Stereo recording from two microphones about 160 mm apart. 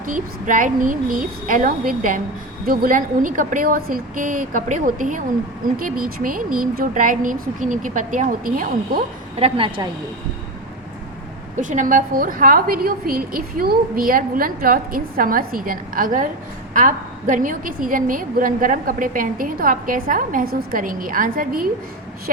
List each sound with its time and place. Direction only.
0.0 s a woman's voice: 55° right (ahead or behind)
9.4 s a woman's voice: 35° right (ahead or behind)
11.5 s a woman's voice: 50° right (ahead or behind)